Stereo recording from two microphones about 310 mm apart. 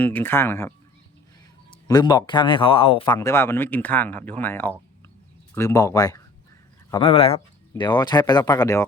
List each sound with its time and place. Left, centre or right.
0.0 s speech: centre
1.9 s speech: centre